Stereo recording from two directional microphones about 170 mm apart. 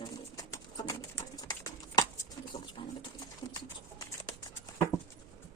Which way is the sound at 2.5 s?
30° left (ahead or behind).